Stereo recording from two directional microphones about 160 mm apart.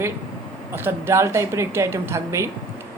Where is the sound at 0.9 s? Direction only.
15° right (ahead or behind).